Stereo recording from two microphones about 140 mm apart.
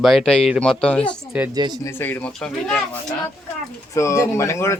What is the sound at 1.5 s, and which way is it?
Speech, 30° right (ahead or behind).